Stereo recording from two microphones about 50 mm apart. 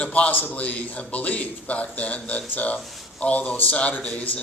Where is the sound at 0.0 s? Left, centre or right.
Left.